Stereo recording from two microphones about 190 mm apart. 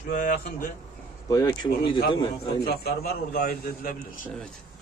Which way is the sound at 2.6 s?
55° left (ahead or behind).